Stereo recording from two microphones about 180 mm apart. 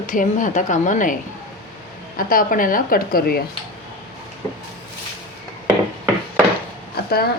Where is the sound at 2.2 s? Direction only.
50° left (ahead or behind).